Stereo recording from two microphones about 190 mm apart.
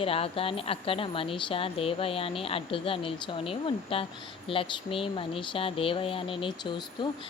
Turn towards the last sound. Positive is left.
turn(degrees=25)  # may be behind; listen again after turning